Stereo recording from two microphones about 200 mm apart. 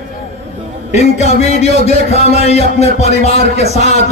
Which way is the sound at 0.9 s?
35° left (ahead or behind).